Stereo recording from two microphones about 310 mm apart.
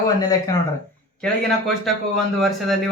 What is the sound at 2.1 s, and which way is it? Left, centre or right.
Speech, centre.